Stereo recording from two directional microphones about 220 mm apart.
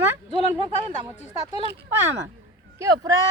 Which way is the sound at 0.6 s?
20° right (ahead or behind).